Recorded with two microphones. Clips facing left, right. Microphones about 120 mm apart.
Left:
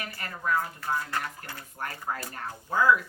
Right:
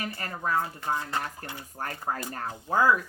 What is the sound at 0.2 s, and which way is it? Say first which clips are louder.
Speech: left 1 dB; 35° right (ahead or behind).